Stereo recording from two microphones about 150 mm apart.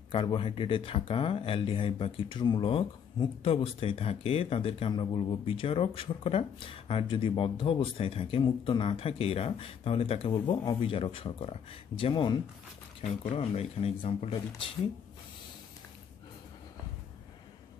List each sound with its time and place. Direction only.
0.1 s speech: 35° left (ahead or behind)